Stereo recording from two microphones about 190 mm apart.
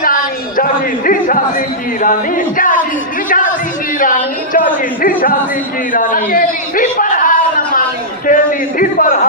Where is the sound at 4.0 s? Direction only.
45° left (ahead or behind).